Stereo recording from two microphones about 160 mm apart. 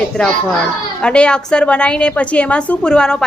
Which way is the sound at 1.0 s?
5° left (ahead or behind).